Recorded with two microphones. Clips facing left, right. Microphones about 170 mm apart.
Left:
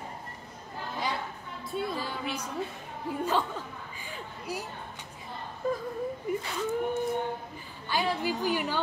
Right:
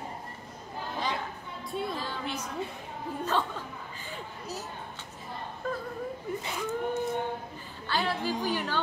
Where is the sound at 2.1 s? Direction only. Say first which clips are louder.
Left 1 dB; 10° left (ahead or behind).